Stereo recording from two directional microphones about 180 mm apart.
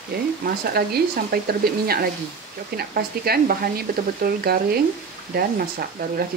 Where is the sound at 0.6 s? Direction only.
60° right (ahead or behind).